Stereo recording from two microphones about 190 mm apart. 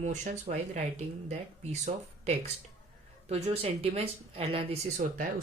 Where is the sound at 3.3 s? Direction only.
35° right (ahead or behind).